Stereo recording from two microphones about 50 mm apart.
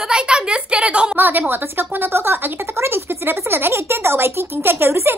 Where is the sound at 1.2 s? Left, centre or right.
Right.